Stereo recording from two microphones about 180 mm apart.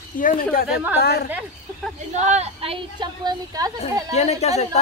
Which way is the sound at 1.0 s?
60° left (ahead or behind).